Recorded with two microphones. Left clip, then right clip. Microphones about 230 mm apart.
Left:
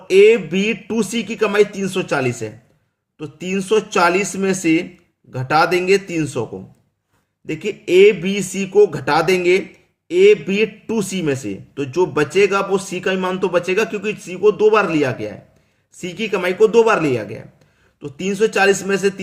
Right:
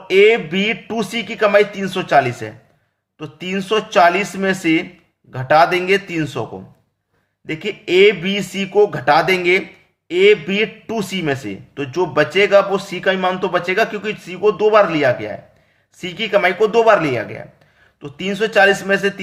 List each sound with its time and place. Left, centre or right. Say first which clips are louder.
0.1 s speech: left 1 dB; centre
7.4 s speech: even; centre